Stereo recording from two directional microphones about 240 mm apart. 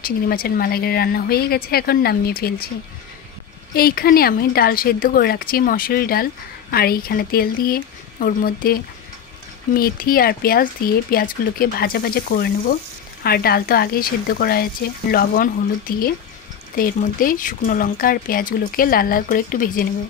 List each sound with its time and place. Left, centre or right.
0.0 s speech: left
3.7 s speech: left
9.8 s speech: left